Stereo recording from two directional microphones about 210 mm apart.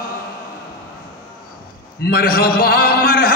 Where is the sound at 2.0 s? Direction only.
45° left (ahead or behind).